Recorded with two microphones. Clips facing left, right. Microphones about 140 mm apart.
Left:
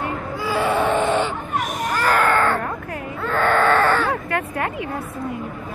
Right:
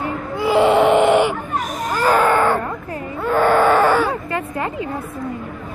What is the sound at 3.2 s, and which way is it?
Baby cry, 10° right (ahead or behind).